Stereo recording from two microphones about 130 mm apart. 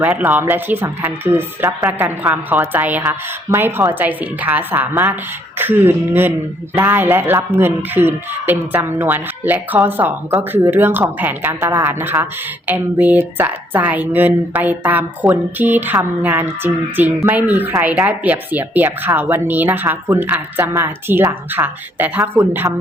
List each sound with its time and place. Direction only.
0.0 s speech: 10° right (ahead or behind)